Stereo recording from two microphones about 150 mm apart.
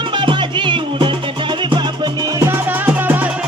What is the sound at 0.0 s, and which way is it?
Music, 30° right (ahead or behind).